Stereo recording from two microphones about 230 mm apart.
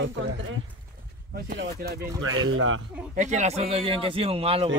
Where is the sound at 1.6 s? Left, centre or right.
Right.